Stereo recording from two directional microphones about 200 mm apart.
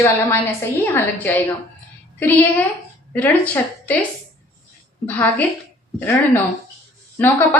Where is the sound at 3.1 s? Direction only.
10° left (ahead or behind).